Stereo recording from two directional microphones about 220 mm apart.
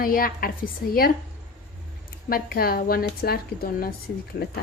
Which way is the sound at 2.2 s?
40° left (ahead or behind).